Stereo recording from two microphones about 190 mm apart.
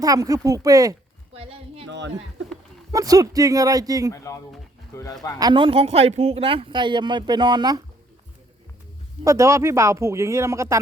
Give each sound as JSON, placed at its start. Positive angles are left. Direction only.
{"t": 0.0, "sound": "speech", "side_deg": -20}
{"t": 1.3, "sound": "a woman's voice", "side_deg": -30}
{"t": 1.9, "sound": "speech", "side_deg": -70}
{"t": 2.9, "sound": "speech", "side_deg": -20}
{"t": 4.1, "sound": "speech", "side_deg": 15}
{"t": 5.4, "sound": "speech", "side_deg": -25}
{"t": 9.2, "sound": "speech", "side_deg": -15}